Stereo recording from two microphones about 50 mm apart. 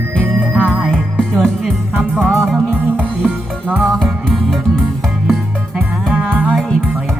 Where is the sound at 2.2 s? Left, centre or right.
Centre.